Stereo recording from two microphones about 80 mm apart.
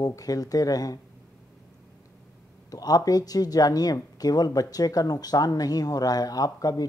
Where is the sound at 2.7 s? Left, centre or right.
Left.